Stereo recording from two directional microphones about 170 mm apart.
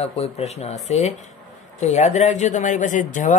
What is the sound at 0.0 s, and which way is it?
Speech, 35° left (ahead or behind).